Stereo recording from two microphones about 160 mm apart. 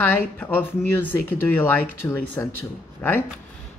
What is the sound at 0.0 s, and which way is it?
Speech, 10° left (ahead or behind).